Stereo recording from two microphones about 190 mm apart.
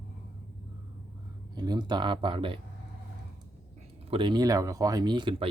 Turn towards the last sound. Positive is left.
turn(degrees=-25)  # may be behind; listen again after turning